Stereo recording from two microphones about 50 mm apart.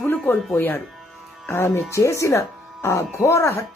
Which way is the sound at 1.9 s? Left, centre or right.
Left.